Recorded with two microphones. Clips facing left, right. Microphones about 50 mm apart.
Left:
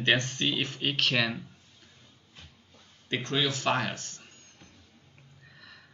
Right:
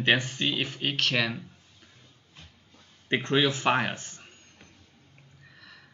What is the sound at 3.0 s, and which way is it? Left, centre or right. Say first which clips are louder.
Speech: right 5 dB; right.